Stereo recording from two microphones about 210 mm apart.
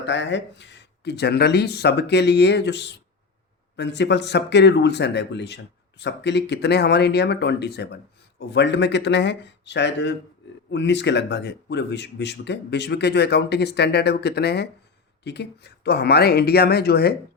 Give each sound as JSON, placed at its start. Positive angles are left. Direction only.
{"t": 0.0, "sound": "speech", "side_deg": 60}